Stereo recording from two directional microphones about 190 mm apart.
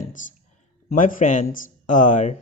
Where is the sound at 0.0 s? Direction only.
45° left (ahead or behind).